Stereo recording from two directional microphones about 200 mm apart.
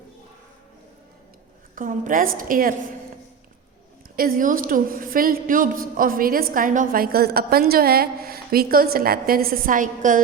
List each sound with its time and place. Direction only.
1.7 s a woman's voice: 40° right (ahead or behind)
4.1 s a woman's voice: 45° right (ahead or behind)